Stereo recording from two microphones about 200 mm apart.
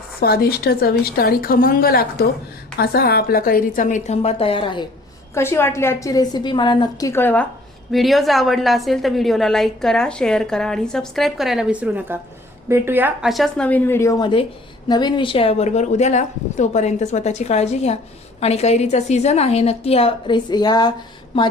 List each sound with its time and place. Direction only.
0.2 s a woman's voice: 50° left (ahead or behind); by 4.9 s 25° left (ahead or behind)
5.3 s a woman's voice: 15° left (ahead or behind)
7.1 s a woman's voice: 10° left (ahead or behind)